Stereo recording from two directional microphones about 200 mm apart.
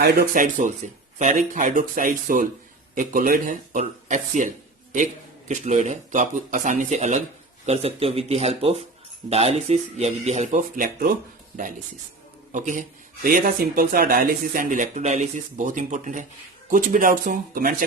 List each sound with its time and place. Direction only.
0.0 s speech: 45° right (ahead or behind)